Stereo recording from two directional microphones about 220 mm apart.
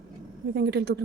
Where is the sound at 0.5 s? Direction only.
50° right (ahead or behind).